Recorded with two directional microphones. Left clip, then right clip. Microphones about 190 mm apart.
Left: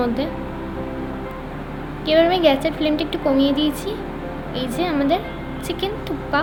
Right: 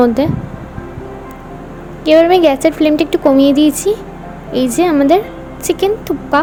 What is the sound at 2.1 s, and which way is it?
A woman's voice, 50° right (ahead or behind).